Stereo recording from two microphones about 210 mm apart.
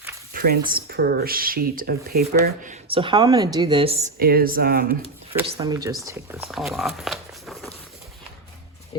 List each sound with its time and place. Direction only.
0.3 s a sound: 45° right (ahead or behind)
0.7 s speech: 45° right (ahead or behind)
2.8 s a woman's voice: 25° right (ahead or behind)
4.2 s speech: 45° right (ahead or behind)
5.5 s speech: 15° right (ahead or behind)
6.4 s speech: centre (ahead or behind)